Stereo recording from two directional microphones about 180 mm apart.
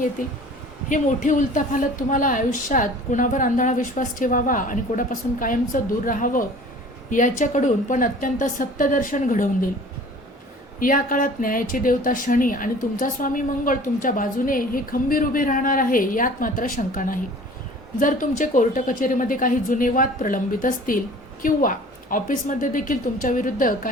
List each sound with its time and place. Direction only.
0.9 s speech: 45° left (ahead or behind)
10.8 s speech: 50° left (ahead or behind)